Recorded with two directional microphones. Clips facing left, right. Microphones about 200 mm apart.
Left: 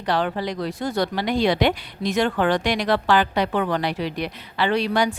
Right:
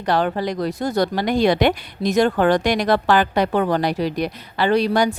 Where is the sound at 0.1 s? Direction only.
45° right (ahead or behind).